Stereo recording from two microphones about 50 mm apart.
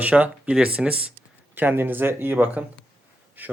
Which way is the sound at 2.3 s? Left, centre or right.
Right.